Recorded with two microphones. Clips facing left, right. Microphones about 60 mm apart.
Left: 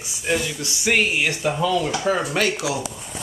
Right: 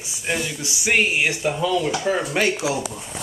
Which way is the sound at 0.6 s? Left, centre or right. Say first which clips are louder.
Right 2 dB; centre.